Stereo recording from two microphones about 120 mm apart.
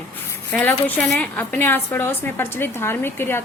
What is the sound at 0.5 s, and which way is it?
A woman's voice, 15° left (ahead or behind).